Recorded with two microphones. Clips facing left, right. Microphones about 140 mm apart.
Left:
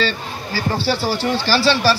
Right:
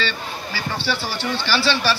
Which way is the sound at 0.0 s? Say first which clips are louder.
Left 4 dB; 40° left (ahead or behind).